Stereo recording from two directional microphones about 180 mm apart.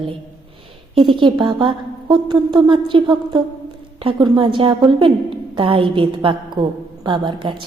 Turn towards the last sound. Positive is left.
turn(degrees=-25)  # may be behind; listen again after turning